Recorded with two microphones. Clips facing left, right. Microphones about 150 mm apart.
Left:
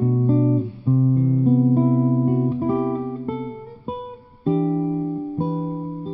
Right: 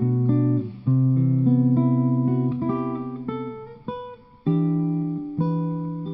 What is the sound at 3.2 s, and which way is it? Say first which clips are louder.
Guitar: left 2 dB; 45° left (ahead or behind).